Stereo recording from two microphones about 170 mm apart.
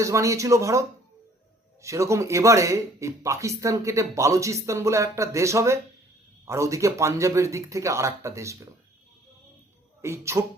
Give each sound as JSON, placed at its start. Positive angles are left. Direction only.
{"t": 0.0, "sound": "speech", "side_deg": -20}
{"t": 10.0, "sound": "speech", "side_deg": -15}